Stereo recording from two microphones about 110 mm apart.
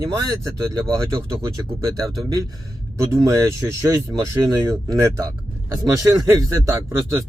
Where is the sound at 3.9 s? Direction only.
35° right (ahead or behind).